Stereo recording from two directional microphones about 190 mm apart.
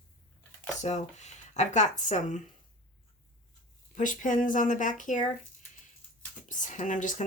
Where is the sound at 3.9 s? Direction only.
45° left (ahead or behind).